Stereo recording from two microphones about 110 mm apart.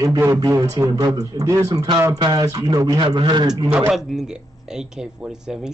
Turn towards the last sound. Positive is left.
turn(degrees=-10)  # may be behind; listen again after turning